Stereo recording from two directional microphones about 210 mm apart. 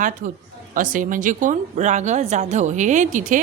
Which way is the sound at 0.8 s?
40° right (ahead or behind).